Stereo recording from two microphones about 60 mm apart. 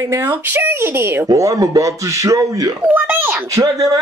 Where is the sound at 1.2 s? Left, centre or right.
Right.